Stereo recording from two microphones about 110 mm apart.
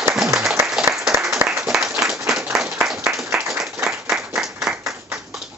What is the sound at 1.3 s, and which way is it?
Applause, 25° right (ahead or behind).